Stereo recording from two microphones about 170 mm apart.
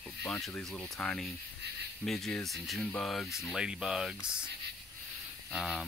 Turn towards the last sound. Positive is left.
turn(degrees=0)  # may be behind; listen again after turning